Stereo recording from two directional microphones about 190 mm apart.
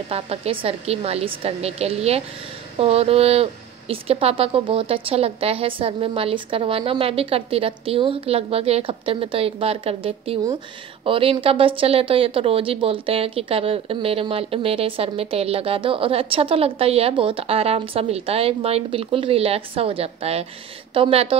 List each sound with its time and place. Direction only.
0.1 s a woman's voice: 30° right (ahead or behind)